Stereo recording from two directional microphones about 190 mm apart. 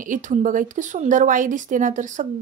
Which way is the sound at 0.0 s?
40° right (ahead or behind).